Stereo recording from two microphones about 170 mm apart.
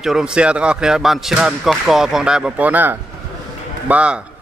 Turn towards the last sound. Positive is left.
turn(degrees=-5)  # may be behind; listen again after turning